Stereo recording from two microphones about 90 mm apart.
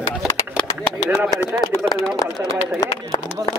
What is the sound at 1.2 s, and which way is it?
Speech, 40° left (ahead or behind).